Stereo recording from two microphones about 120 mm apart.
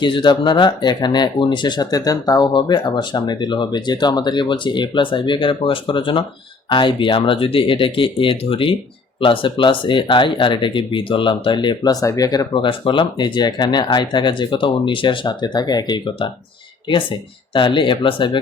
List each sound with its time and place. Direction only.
0.0 s speech: 40° left (ahead or behind)
12.6 s speech: 45° left (ahead or behind)
17.5 s speech: 40° left (ahead or behind)